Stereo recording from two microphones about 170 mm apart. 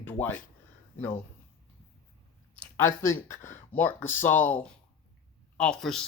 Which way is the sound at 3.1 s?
15° left (ahead or behind).